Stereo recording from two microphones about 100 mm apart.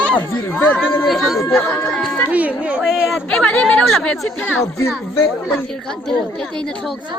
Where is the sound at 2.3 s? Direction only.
15° right (ahead or behind).